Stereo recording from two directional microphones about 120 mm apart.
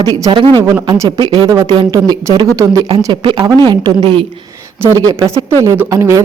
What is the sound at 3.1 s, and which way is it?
Speech, 40° right (ahead or behind).